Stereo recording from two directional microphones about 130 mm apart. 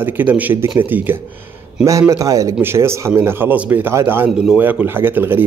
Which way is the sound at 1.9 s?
25° right (ahead or behind).